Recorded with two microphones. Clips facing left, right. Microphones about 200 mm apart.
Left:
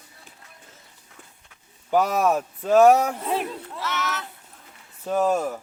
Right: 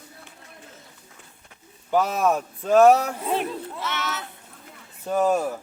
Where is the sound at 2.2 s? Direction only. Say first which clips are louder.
Even; 5° left (ahead or behind).